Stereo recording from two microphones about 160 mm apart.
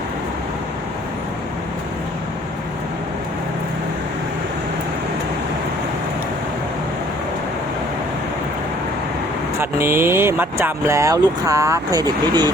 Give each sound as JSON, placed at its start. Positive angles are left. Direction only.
{"t": 9.6, "sound": "speech", "side_deg": -15}